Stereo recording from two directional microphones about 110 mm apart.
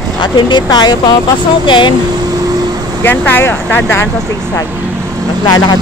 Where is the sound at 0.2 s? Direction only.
45° left (ahead or behind).